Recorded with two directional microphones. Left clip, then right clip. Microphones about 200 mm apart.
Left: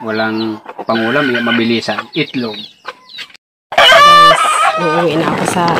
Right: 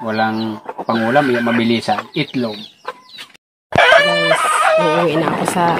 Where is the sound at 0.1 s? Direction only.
40° right (ahead or behind).